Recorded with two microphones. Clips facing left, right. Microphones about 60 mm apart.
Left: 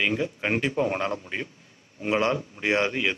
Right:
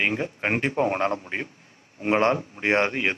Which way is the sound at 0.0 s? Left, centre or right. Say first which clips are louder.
Right 1 dB; right.